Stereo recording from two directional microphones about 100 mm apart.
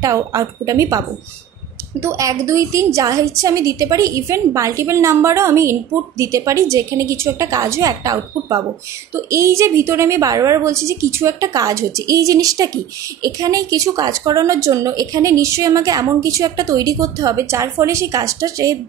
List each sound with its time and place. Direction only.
0.0 s a woman's voice: 35° right (ahead or behind)